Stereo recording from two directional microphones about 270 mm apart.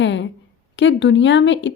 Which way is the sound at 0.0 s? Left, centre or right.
Left.